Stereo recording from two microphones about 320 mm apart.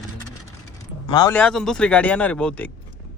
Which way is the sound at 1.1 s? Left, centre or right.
Centre.